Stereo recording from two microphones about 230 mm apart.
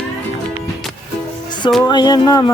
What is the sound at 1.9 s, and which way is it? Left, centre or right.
Speech, centre.